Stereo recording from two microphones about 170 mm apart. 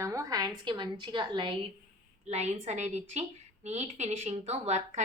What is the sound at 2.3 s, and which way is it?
A woman's voice, 40° right (ahead or behind).